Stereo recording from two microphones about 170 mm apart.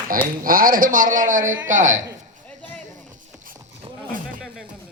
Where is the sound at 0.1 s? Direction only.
55° right (ahead or behind).